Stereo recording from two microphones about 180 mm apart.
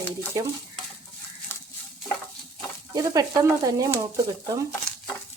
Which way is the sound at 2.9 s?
20° right (ahead or behind).